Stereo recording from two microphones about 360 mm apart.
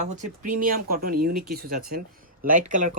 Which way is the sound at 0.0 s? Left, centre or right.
Right.